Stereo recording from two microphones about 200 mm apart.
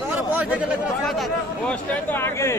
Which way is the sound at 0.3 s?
10° right (ahead or behind).